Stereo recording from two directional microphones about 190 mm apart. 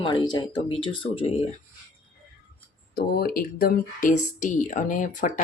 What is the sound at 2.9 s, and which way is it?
Speech, 55° left (ahead or behind).